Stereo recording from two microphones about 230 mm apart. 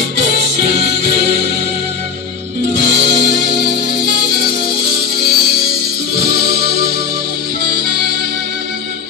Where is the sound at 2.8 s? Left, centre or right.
Right.